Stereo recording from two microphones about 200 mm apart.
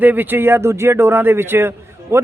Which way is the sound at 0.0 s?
10° right (ahead or behind).